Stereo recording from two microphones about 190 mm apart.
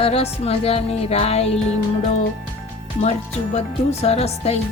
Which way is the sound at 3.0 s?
35° left (ahead or behind).